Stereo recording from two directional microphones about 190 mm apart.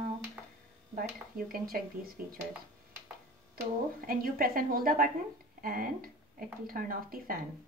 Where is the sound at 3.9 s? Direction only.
50° right (ahead or behind).